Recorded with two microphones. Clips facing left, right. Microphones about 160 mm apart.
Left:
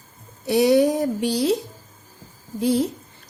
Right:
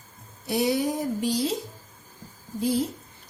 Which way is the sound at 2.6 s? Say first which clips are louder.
Left 5 dB; 80° left.